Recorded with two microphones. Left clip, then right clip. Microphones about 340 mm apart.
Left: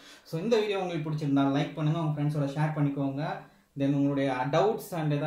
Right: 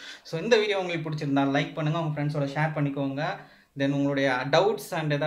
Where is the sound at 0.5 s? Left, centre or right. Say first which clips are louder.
Right 4 dB; right.